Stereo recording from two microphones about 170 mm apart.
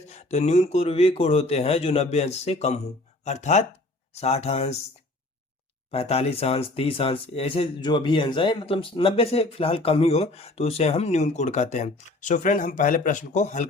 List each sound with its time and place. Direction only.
0.1 s speech: 40° left (ahead or behind)
5.9 s speech: 35° left (ahead or behind)